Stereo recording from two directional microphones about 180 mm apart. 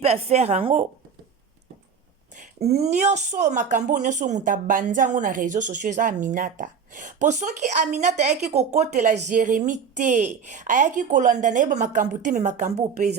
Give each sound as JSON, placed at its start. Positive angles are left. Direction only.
{"t": 0.0, "sound": "a woman's voice", "side_deg": -35}
{"t": 2.4, "sound": "speech", "side_deg": -35}